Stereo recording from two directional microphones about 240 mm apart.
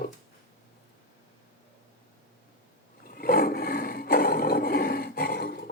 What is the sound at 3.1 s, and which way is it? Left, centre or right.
Roar, left.